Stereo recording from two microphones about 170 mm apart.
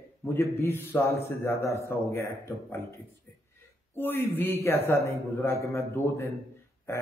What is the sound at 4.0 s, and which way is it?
A man's voice, 10° left (ahead or behind).